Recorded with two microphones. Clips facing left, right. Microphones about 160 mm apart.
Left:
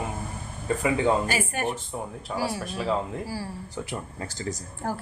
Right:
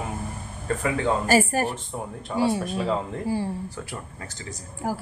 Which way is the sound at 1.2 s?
40° right (ahead or behind).